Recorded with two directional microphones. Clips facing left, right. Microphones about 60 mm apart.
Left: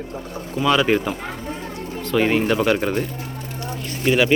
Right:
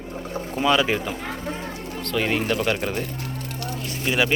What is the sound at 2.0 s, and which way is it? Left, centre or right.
Speech, centre.